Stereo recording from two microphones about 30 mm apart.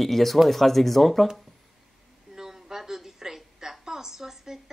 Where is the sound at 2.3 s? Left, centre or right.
Centre.